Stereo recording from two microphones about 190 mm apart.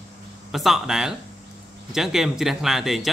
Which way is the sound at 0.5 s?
Centre (ahead or behind).